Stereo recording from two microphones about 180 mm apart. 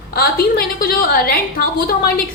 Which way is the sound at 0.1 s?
55° left (ahead or behind).